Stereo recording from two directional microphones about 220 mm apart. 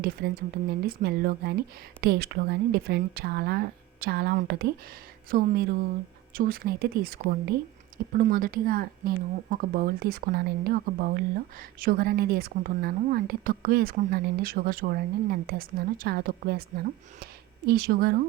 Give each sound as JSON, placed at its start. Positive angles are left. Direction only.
{"t": 0.2, "sound": "a woman's voice", "side_deg": -45}